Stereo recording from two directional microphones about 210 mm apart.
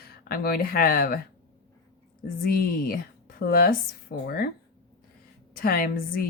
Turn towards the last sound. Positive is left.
turn(degrees=45)  # may be behind; listen again after turning